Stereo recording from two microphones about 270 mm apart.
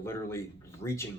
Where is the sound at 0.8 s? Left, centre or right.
Left.